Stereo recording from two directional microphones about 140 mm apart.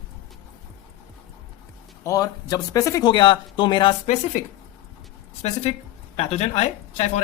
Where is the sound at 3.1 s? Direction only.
35° left (ahead or behind).